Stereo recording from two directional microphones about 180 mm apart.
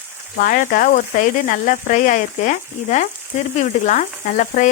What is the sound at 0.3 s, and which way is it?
Frying, 50° left (ahead or behind).